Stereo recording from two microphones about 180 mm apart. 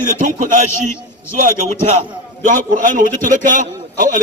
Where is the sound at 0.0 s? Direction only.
45° right (ahead or behind).